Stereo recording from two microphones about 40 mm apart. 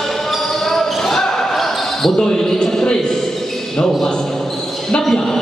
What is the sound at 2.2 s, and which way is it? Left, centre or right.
Speech, centre.